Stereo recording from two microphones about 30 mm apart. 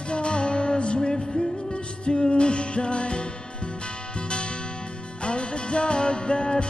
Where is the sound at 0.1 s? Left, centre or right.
Left.